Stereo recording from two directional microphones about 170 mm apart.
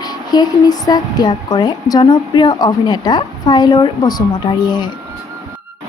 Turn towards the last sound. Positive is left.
turn(degrees=25)  # may be behind; listen again after turning